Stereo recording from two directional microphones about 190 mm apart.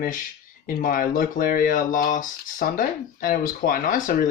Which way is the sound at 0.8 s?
45° left (ahead or behind).